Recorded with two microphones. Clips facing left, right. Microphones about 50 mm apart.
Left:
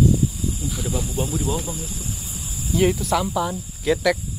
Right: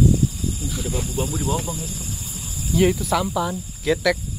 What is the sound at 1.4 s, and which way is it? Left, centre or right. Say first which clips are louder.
Speech: right 1 dB; right.